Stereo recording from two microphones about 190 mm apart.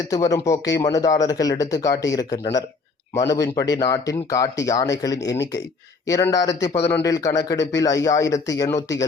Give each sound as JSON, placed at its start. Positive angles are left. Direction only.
{"t": 0.1, "sound": "speech", "side_deg": 20}